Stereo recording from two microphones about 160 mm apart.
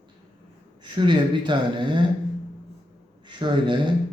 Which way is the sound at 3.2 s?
30° right (ahead or behind).